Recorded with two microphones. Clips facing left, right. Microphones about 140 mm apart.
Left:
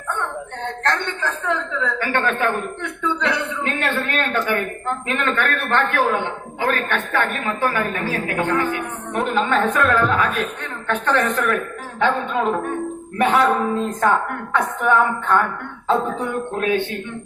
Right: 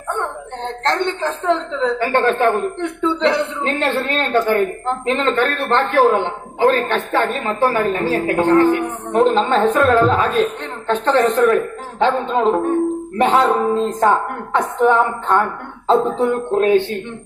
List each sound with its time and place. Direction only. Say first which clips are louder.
0.9 s a woman's voice: right 4 dB; 30° right (ahead or behind)